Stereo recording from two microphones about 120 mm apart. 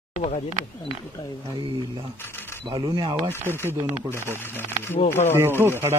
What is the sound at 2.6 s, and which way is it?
Speech, 40° right (ahead or behind).